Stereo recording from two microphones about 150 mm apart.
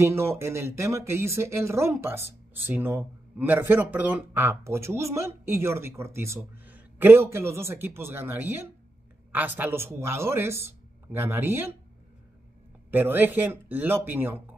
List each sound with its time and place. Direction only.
0.0 s speech: 15° right (ahead or behind)
12.9 s speech: 15° right (ahead or behind)